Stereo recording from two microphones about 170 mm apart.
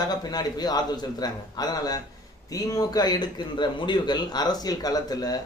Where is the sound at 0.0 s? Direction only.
25° left (ahead or behind).